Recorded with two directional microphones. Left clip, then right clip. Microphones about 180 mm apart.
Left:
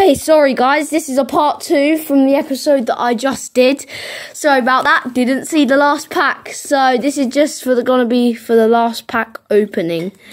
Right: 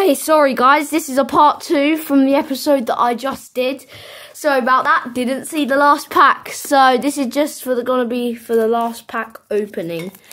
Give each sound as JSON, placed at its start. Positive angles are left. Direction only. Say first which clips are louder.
{"t": 0.0, "sound": "a woman's voice", "louder": "left 3 dB", "side_deg": 5}
{"t": 3.0, "sound": "a woman's voice", "louder": "even", "side_deg": 20}
{"t": 3.3, "sound": "speech", "louder": "left 7 dB", "side_deg": 45}
{"t": 4.4, "sound": "a woman's voice", "louder": "left 2 dB", "side_deg": 25}
{"t": 5.8, "sound": "a woman's voice", "louder": "right 1 dB", "side_deg": 5}